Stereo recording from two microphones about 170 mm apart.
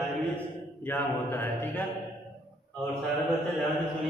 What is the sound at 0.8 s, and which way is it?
Speech, 10° left (ahead or behind).